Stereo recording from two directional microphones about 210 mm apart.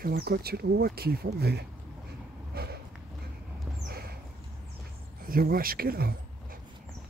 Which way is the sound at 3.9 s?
45° right (ahead or behind).